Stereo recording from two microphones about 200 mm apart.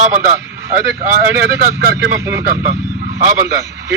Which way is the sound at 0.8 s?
15° right (ahead or behind).